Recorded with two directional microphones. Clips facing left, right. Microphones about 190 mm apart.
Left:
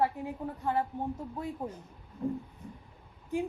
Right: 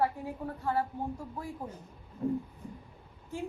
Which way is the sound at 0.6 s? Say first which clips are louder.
Left 1 dB; 20° left (ahead or behind).